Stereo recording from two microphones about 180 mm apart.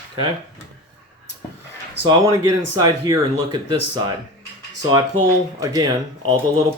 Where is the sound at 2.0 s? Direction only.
20° right (ahead or behind).